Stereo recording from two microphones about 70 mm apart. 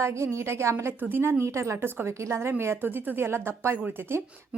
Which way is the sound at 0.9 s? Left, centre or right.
Right.